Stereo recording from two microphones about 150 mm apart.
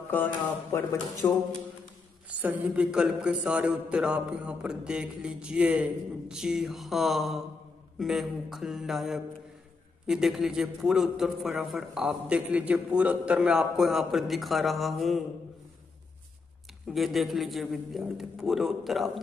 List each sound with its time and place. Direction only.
0.1 s speech: 15° left (ahead or behind)
2.2 s a man's voice: 10° right (ahead or behind)
16.8 s a man's voice: centre (ahead or behind)